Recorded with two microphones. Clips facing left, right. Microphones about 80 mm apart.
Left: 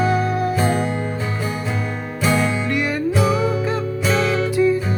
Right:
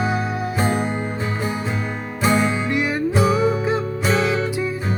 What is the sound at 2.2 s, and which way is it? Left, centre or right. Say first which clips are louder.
Music: right 1 dB; centre.